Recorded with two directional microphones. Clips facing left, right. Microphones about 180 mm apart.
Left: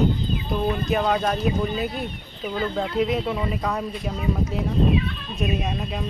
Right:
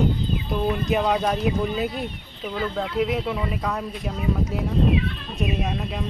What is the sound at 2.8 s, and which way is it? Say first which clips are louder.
Speech: left 1 dB; 5° right (ahead or behind).